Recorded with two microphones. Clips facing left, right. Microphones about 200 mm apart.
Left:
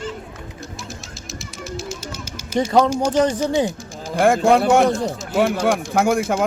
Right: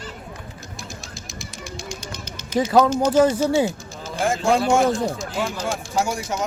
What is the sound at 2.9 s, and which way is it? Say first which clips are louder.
Speech: even; 10° left (ahead or behind).